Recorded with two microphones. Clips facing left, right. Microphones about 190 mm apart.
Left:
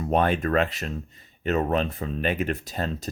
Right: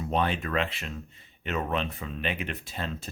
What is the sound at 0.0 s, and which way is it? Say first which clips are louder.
Speech: left 5 dB; 50° left (ahead or behind).